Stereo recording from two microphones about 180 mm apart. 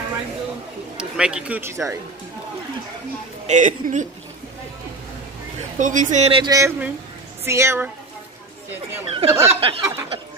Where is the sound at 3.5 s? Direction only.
45° right (ahead or behind).